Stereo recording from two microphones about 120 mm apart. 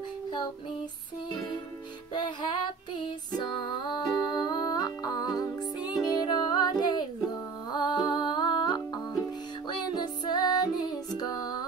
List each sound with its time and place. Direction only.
1.3 s music: 35° left (ahead or behind)